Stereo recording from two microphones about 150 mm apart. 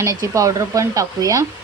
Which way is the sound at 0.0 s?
20° right (ahead or behind).